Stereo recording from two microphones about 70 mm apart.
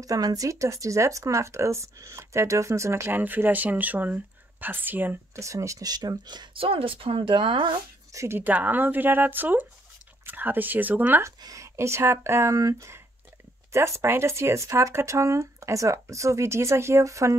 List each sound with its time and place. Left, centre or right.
0.0 s speech: right
3.1 s speech: right
5.3 s speech: right
5.9 s speech: right
8.1 s speech: right
8.4 s speech: right
11.4 s speech: right
12.5 s speech: right